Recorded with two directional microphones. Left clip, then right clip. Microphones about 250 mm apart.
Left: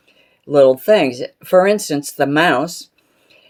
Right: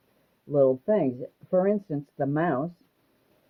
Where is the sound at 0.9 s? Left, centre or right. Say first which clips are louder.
Left 12 dB; centre.